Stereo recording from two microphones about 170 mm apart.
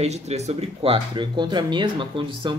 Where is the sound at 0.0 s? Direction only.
40° right (ahead or behind).